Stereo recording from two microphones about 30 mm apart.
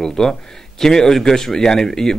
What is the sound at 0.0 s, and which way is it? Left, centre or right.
A man's voice, centre.